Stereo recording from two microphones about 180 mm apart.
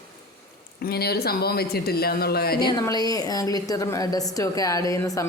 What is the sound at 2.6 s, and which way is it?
A woman's voice, 25° left (ahead or behind).